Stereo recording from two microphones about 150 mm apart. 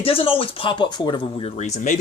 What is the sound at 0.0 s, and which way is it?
Speech, 40° left (ahead or behind).